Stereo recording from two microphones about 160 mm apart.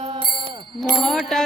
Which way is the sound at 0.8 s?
Centre (ahead or behind).